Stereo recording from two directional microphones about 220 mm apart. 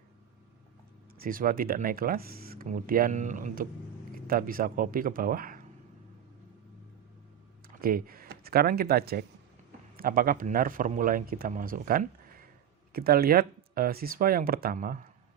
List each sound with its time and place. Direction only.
1.2 s speech: 40° right (ahead or behind)
7.8 s speech: 40° right (ahead or behind)